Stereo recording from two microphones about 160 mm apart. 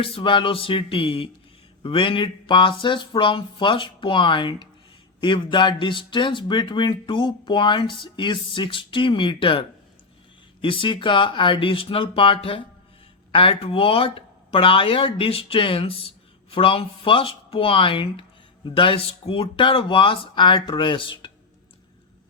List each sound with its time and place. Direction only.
0.0 s speech: 35° left (ahead or behind)